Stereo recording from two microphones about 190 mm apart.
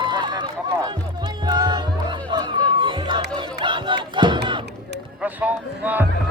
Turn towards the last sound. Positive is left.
turn(degrees=-10)  # may be behind; listen again after turning